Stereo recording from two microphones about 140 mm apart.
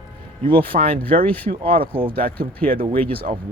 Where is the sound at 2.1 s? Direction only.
90° right.